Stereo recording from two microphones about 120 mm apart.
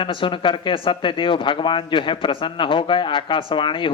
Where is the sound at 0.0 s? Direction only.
45° left (ahead or behind).